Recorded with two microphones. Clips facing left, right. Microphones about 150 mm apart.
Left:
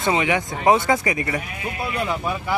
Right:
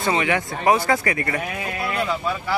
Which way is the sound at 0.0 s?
20° left (ahead or behind).